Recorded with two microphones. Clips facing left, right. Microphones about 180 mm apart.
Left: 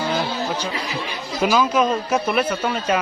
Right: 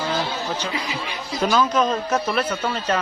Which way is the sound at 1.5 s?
5° left (ahead or behind).